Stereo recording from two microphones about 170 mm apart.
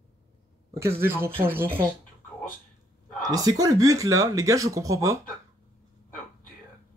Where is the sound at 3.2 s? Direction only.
20° right (ahead or behind).